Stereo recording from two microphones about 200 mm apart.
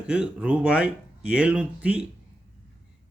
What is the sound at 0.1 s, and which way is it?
Speech, 5° right (ahead or behind).